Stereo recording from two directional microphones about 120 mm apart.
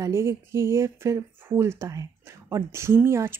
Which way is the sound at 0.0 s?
20° right (ahead or behind).